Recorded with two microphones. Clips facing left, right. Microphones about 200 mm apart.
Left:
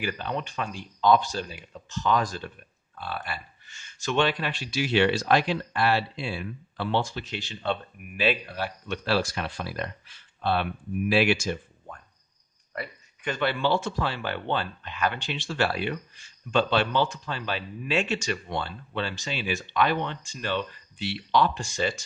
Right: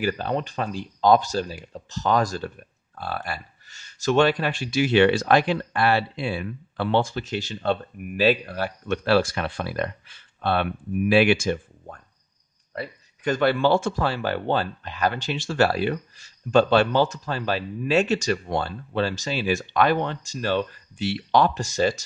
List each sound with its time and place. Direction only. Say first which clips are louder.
0.0 s speech: right 6 dB; 40° right (ahead or behind)
12.7 s a sound: right 3 dB; 30° right (ahead or behind)
13.3 s speech: right 6 dB; 45° right (ahead or behind)